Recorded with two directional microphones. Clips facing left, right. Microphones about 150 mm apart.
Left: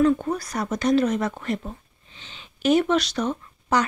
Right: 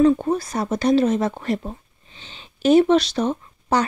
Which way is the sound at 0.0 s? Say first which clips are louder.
Right 4 dB; 30° right (ahead or behind).